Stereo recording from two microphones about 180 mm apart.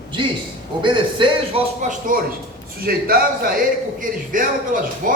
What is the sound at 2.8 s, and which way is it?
A man's voice, 55° right (ahead or behind).